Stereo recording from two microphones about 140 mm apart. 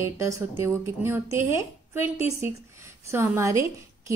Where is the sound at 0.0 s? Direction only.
20° right (ahead or behind).